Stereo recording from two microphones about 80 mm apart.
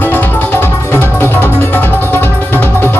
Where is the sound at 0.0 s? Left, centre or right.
Left.